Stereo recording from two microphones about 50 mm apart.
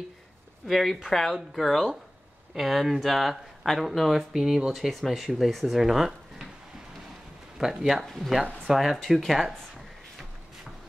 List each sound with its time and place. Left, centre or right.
0.7 s speech: centre
7.5 s speech: centre
8.0 s speech: centre